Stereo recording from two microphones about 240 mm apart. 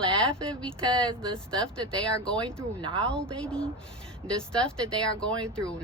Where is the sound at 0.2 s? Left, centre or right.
Centre.